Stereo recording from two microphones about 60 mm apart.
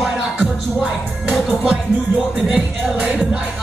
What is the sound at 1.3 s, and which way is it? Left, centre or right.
Music, centre.